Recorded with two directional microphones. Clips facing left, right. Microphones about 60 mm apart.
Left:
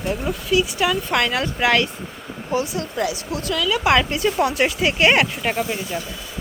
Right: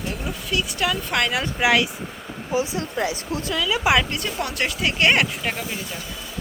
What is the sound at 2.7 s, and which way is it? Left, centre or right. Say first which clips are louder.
Speech: left 1 dB; right.